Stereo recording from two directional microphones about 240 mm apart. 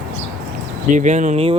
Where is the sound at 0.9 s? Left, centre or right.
Right.